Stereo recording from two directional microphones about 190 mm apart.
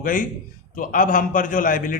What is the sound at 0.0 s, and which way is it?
A man's voice, 45° left (ahead or behind).